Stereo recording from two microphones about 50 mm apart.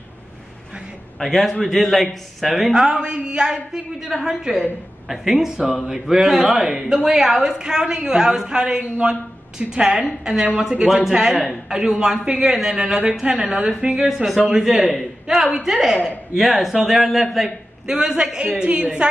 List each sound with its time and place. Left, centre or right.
1.2 s a man's voice: centre
17.8 s a man's voice: centre